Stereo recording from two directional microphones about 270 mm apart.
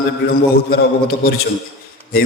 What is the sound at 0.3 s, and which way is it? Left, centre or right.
A man's voice, left.